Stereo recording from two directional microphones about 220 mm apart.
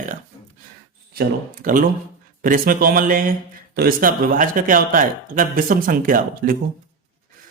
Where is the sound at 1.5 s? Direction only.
40° right (ahead or behind).